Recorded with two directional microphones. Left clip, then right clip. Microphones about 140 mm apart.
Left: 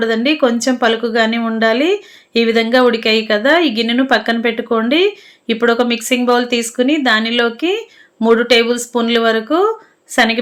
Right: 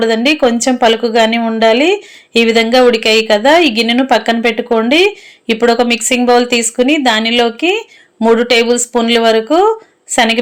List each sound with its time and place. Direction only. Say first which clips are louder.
0.0 s a woman's voice: right 3 dB; 20° right (ahead or behind)